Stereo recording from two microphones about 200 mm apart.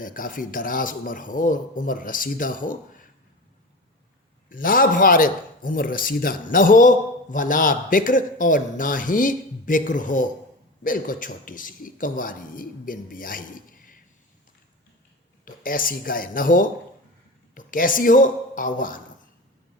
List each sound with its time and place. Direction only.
0.0 s a man's voice: 45° left (ahead or behind)
4.4 s a man's voice: 45° left (ahead or behind)
15.4 s a man's voice: 45° left (ahead or behind)